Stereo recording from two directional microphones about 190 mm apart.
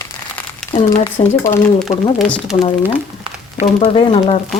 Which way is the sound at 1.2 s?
30° left (ahead or behind).